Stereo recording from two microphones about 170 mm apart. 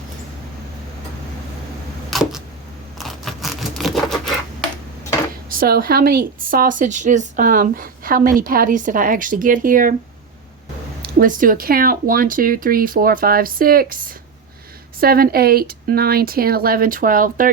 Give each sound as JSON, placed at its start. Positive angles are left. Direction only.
{"t": 2.0, "sound": "camera", "side_deg": 0}
{"t": 3.0, "sound": "patter", "side_deg": 0}
{"t": 5.5, "sound": "speech", "side_deg": -60}
{"t": 11.2, "sound": "speech", "side_deg": -55}